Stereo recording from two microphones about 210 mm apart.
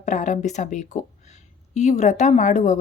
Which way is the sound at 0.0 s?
35° left (ahead or behind).